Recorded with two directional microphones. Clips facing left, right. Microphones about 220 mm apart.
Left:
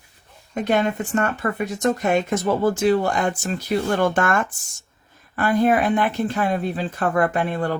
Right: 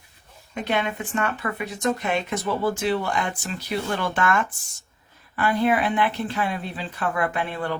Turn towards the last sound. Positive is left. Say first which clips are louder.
# left 5 dB
turn(degrees=45)  # may be behind; listen again after turning